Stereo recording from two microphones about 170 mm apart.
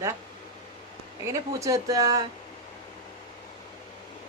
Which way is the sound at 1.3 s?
20° right (ahead or behind).